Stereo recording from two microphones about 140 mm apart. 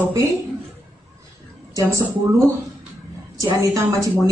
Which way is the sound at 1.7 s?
20° right (ahead or behind).